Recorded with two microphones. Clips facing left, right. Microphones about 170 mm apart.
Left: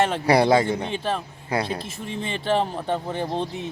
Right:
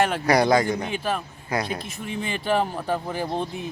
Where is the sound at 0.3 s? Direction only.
30° left (ahead or behind).